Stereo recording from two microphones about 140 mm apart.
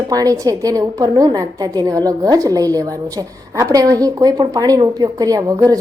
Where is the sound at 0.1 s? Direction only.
25° right (ahead or behind).